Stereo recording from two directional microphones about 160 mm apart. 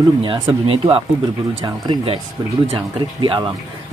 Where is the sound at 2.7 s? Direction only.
30° right (ahead or behind).